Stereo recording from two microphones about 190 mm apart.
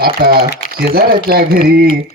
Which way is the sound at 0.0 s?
55° right (ahead or behind).